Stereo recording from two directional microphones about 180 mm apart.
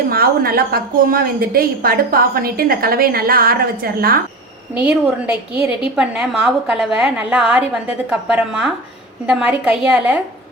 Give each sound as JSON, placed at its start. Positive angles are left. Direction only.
{"t": 0.1, "sound": "a woman's voice", "side_deg": -55}
{"t": 4.8, "sound": "a woman's voice", "side_deg": -5}